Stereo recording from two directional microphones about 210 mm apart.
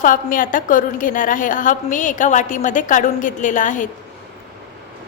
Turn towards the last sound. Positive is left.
turn(degrees=35)  # may be behind; listen again after turning